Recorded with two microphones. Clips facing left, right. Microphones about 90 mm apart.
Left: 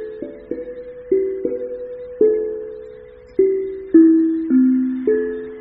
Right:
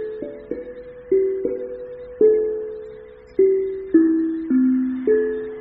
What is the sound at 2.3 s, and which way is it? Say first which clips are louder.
Music: right 1 dB; 40° right (ahead or behind).